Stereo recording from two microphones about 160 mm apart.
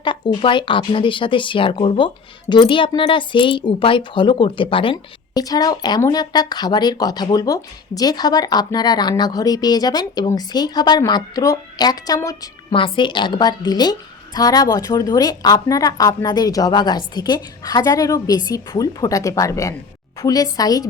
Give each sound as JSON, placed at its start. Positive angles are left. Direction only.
{"t": 0.0, "sound": "speech", "side_deg": 30}